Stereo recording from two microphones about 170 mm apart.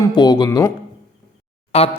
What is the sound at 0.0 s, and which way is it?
Speech, 25° left (ahead or behind).